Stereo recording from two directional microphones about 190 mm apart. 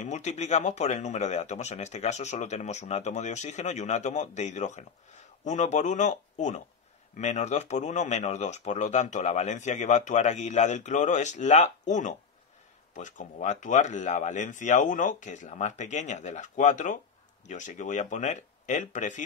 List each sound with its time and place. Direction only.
0.0 s speech: 35° left (ahead or behind)